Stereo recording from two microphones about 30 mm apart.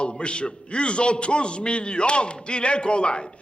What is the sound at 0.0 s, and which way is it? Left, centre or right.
A man's voice, left.